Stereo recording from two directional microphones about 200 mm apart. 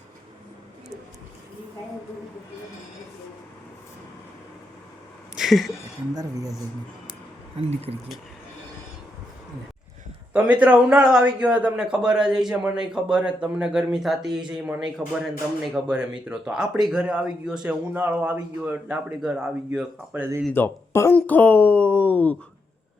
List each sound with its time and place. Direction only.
5.3 s speech: centre (ahead or behind)
7.6 s speech: 30° right (ahead or behind)
10.3 s a man's voice: 10° right (ahead or behind)
20.5 s speech: 10° left (ahead or behind)